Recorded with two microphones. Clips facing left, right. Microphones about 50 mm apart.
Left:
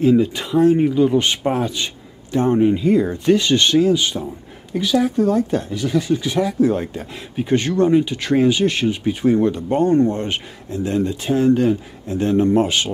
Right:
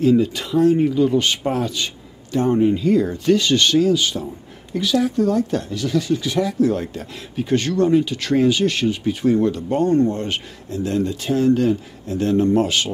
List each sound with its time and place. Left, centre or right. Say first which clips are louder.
0.0 s speech: left 1 dB; centre